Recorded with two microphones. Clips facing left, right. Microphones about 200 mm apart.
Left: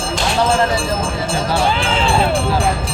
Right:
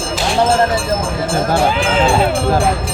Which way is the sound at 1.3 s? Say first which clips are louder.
Right 4 dB; 50° right (ahead or behind).